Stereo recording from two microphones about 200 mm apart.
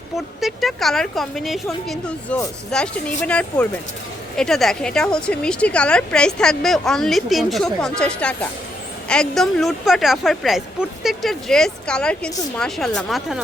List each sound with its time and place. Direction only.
0.2 s speech: centre (ahead or behind)